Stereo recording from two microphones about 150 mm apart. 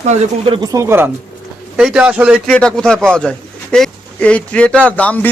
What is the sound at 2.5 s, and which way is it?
A man's voice, 5° left (ahead or behind).